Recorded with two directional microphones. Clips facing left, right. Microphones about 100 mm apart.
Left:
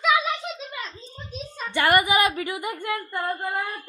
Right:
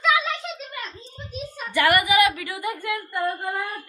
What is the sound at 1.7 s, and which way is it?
A woman's voice, 25° left (ahead or behind).